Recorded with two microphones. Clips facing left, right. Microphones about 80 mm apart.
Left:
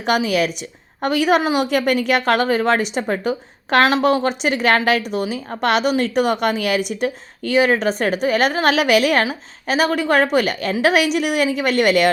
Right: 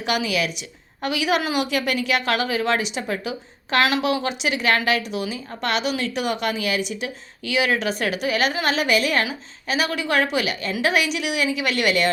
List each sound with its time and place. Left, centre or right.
0.0 s a woman's voice: left